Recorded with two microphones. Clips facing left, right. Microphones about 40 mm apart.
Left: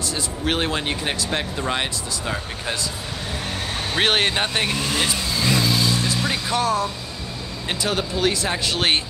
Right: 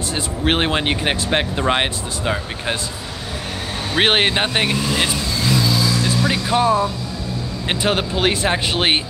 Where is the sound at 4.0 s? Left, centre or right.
Right.